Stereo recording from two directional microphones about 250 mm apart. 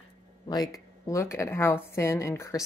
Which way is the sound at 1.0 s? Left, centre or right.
Centre.